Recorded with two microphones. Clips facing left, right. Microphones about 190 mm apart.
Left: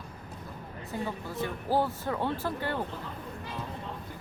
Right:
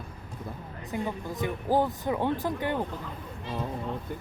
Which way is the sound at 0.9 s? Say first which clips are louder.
Right 3 dB; 15° right (ahead or behind).